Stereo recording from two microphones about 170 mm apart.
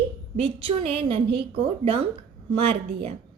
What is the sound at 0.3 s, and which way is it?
A woman's voice, 35° right (ahead or behind).